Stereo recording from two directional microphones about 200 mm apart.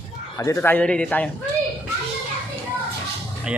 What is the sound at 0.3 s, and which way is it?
Speech, 15° left (ahead or behind).